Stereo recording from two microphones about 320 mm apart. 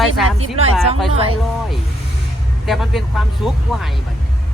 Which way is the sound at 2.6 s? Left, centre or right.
Centre.